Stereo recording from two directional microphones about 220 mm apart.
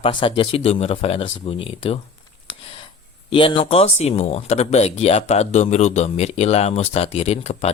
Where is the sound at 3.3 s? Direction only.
25° left (ahead or behind).